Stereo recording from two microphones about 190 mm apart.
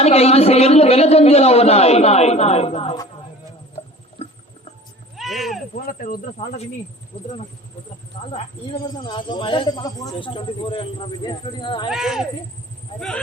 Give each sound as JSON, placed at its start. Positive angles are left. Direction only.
{"t": 0.0, "sound": "a man's voice", "side_deg": 35}
{"t": 4.2, "sound": "rodents", "side_deg": 30}
{"t": 5.1, "sound": "a sound", "side_deg": 0}
{"t": 5.7, "sound": "speech", "side_deg": 45}
{"t": 8.3, "sound": "speech", "side_deg": 30}
{"t": 11.9, "sound": "speech", "side_deg": 0}